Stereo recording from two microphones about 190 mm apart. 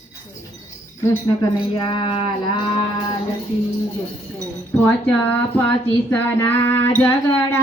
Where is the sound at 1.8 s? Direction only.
25° left (ahead or behind).